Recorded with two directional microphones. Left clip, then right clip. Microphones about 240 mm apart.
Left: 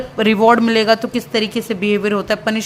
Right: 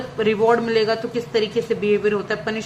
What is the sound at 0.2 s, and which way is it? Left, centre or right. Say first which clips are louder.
A man's voice: left 5 dB; left.